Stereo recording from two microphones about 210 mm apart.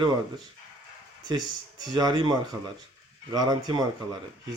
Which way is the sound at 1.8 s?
20° right (ahead or behind).